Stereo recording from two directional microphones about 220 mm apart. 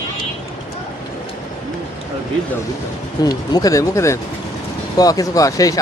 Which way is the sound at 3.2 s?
15° left (ahead or behind).